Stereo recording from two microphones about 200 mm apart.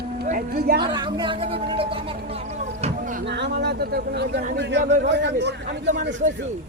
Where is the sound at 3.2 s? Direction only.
60° right (ahead or behind).